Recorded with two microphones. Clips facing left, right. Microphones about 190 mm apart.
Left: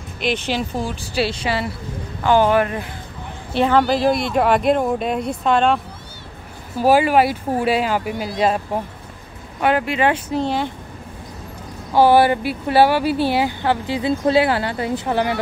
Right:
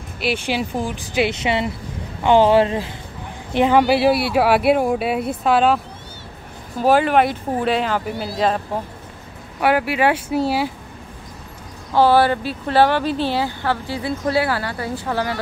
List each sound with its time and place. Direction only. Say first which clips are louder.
0.2 s speech: even; 10° right (ahead or behind); by 2.9 s 25° right (ahead or behind)
3.5 s speech: right 1 dB; 15° right (ahead or behind)
6.8 s speech: left 1 dB; 10° left (ahead or behind)
9.6 s speech: even; 10° right (ahead or behind)
11.9 s speech: left 1 dB; 15° left (ahead or behind)